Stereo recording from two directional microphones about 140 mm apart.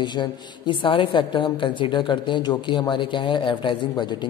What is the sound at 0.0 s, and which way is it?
A woman's voice, 35° left (ahead or behind).